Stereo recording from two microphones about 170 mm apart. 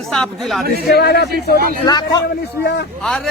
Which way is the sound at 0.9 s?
70° left (ahead or behind).